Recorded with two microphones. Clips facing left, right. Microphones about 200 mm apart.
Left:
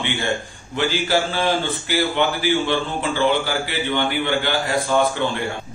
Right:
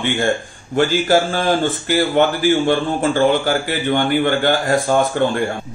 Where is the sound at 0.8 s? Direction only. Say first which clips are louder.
Right 6 dB; 45° right (ahead or behind).